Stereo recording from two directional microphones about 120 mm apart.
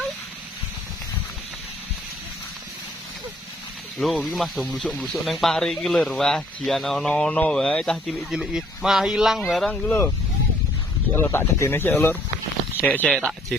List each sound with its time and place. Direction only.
3.9 s speech: centre (ahead or behind)
8.3 s speech: 5° right (ahead or behind)
11.1 s speech: 20° left (ahead or behind)